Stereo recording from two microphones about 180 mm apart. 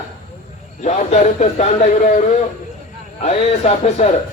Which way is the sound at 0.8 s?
40° left (ahead or behind).